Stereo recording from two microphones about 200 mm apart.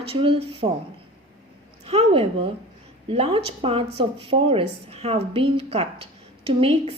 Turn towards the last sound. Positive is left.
turn(degrees=-25)  # may be behind; listen again after turning